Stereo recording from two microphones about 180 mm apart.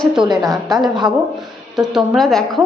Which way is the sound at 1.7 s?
Centre (ahead or behind).